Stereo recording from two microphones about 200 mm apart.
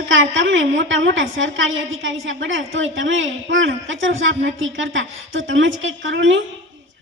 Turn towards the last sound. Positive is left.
turn(degrees=-65)  # may be behind; listen again after turning